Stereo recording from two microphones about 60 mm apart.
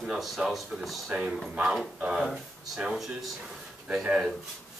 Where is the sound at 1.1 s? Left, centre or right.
Centre.